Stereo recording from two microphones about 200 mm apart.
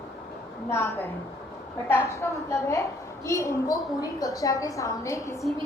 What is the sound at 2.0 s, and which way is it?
A woman's voice, 15° left (ahead or behind).